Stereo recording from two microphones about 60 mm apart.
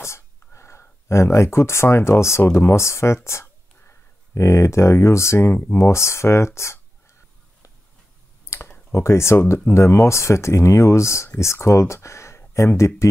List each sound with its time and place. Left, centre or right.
0.0 s speech: left
5.5 s speech: left
5.8 s speech: left
8.5 s clicking: left
8.9 s speech: left